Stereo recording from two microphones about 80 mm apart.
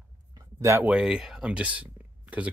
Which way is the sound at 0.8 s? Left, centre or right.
Centre.